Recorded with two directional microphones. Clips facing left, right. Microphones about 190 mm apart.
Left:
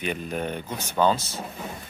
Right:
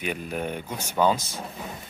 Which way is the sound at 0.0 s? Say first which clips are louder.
Left 1 dB; 5° right (ahead or behind).